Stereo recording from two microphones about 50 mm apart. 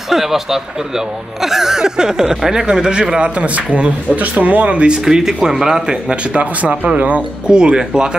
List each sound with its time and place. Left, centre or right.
0.1 s speech: centre; by 5.0 s right
5.0 s speech: centre; by 7.5 s right
7.5 s speech: centre